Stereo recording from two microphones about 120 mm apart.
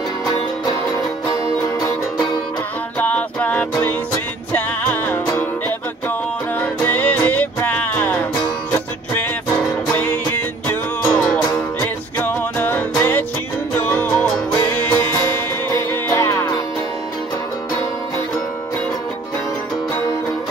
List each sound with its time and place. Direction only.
3.0 s music: 15° left (ahead or behind)
9.9 s music: 15° left (ahead or behind)